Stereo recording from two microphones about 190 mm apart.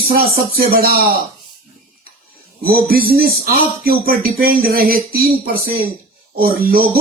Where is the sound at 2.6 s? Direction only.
50° right (ahead or behind).